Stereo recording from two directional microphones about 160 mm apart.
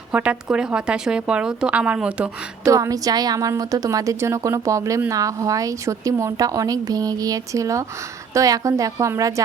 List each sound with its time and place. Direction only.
0.1 s a woman's voice: 5° right (ahead or behind)
2.6 s a woman's voice: 20° right (ahead or behind)